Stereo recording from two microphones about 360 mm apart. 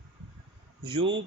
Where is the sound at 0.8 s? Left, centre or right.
Centre.